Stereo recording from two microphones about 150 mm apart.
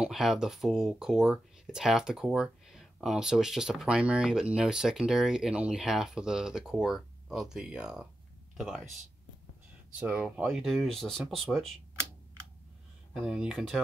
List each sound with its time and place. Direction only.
0.0 s speech: centre (ahead or behind)
9.9 s speech: 10° right (ahead or behind)
13.2 s speech: 5° right (ahead or behind)